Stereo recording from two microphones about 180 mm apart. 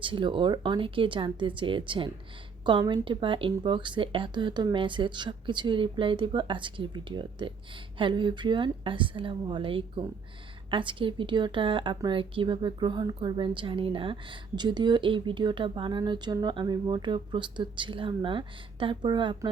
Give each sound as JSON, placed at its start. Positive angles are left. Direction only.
{"t": 0.0, "sound": "a woman's voice", "side_deg": -30}